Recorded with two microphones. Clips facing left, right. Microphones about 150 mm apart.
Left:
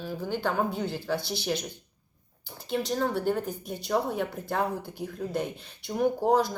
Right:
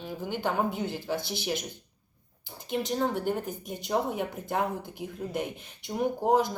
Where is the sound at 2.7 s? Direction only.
15° right (ahead or behind).